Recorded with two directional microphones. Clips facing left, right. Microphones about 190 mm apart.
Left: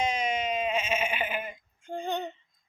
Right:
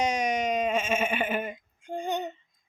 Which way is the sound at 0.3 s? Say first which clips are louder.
Right 3 dB; 45° right (ahead or behind).